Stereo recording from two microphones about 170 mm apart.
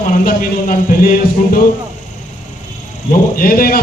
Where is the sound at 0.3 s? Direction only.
55° left (ahead or behind).